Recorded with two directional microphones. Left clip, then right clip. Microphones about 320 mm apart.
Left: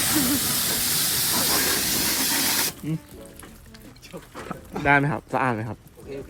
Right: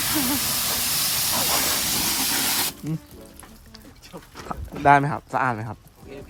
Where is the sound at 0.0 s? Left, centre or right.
Centre.